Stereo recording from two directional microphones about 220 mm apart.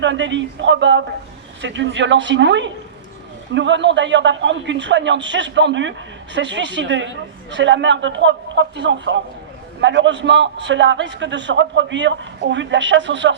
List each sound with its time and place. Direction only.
0.0 s a man's voice: 55° right (ahead or behind)